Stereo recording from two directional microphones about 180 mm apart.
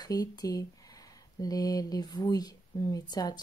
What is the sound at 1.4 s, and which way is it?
Speech, 20° left (ahead or behind).